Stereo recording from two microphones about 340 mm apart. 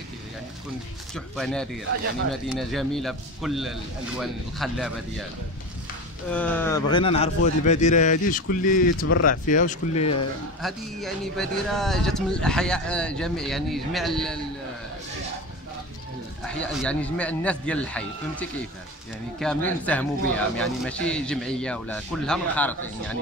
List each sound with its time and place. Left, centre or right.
1.1 s speech: centre
2.7 s speech: centre
6.3 s speech: centre
10.6 s speech: centre
16.4 s speech: centre